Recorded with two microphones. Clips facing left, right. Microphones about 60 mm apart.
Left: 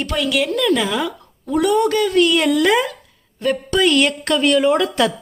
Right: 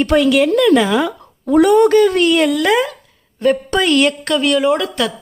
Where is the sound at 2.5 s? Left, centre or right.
Centre.